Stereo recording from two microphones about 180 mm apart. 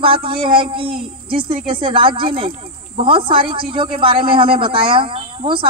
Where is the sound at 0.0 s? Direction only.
30° right (ahead or behind).